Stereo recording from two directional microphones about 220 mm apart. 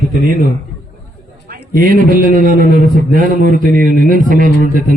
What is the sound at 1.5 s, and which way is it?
A man's voice, 40° right (ahead or behind).